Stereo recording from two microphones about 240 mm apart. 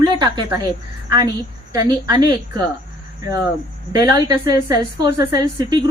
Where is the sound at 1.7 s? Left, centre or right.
Centre.